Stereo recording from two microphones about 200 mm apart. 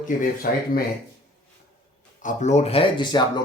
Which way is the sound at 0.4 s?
45° left (ahead or behind).